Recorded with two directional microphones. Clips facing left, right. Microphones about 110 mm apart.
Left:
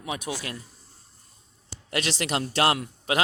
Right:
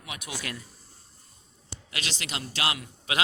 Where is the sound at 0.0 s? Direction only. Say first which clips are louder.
Left 6 dB; 35° left (ahead or behind).